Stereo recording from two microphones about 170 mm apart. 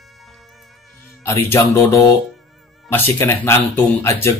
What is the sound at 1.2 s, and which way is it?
Speech, 15° left (ahead or behind).